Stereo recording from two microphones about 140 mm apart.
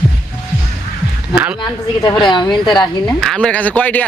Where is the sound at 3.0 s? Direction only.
5° left (ahead or behind).